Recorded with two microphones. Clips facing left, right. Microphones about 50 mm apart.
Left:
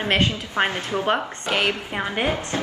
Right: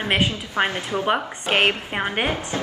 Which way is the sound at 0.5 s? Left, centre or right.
Left.